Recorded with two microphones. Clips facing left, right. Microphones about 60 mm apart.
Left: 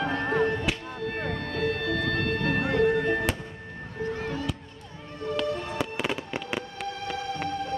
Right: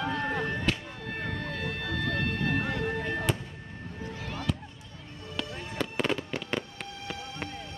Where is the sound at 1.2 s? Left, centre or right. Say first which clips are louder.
Left 4 dB; left.